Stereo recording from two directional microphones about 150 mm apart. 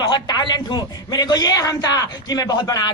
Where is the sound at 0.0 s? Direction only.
30° left (ahead or behind).